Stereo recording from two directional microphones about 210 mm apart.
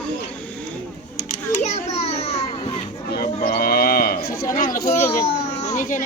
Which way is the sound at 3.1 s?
45° left (ahead or behind).